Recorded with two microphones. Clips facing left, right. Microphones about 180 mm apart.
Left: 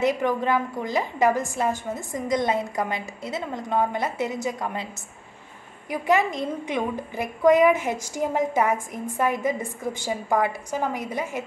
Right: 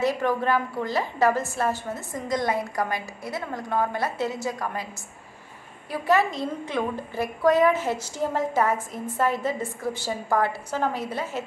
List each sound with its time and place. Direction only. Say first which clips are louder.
0.0 s a woman's voice: left 1 dB; 20° left (ahead or behind)
5.9 s a woman's voice: even; 15° left (ahead or behind)